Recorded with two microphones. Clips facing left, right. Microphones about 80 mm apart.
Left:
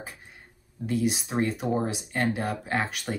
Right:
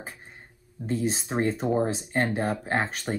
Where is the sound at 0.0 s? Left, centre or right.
Right.